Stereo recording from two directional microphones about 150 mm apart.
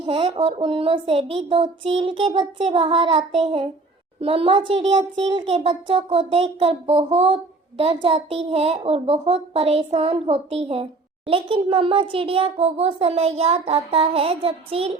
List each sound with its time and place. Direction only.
0.0 s a child's voice: 40° right (ahead or behind)